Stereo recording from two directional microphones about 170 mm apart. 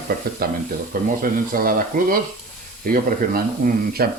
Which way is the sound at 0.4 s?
65° right (ahead or behind).